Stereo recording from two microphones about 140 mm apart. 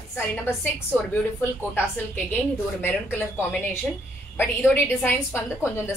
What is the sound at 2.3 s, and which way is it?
A woman's voice, 10° left (ahead or behind).